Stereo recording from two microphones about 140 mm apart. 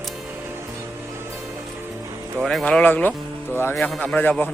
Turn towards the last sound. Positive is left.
turn(degrees=10)  # may be behind; listen again after turning